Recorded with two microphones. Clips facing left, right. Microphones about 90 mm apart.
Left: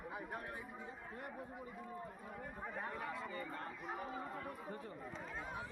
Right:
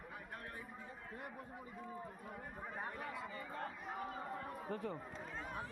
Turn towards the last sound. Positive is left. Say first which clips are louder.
# right 5 dB
turn(degrees=-80)